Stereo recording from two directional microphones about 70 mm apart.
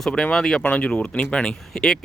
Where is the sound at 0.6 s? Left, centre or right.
Centre.